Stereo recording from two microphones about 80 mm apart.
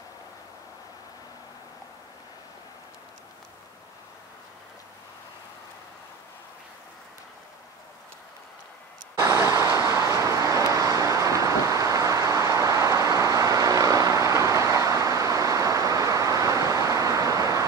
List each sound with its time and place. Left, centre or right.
9.2 s vehicle: right